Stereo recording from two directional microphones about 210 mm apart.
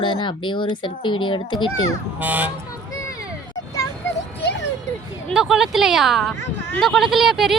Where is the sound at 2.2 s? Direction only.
10° right (ahead or behind).